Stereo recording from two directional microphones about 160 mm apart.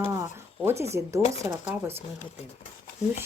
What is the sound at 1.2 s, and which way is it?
Speech, 40° left (ahead or behind).